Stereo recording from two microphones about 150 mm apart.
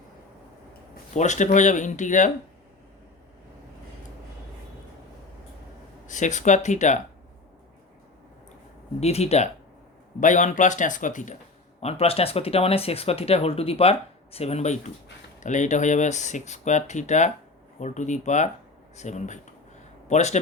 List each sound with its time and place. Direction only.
1.1 s speech: 55° left (ahead or behind)
6.1 s speech: 55° left (ahead or behind)
9.0 s speech: 45° left (ahead or behind)
10.2 s speech: 55° left (ahead or behind)
11.8 s speech: 40° left (ahead or behind)